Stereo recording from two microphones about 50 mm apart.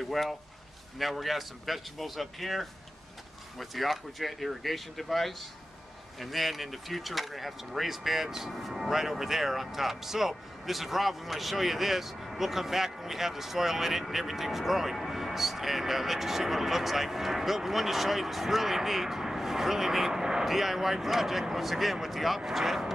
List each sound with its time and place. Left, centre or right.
0.0 s speech: centre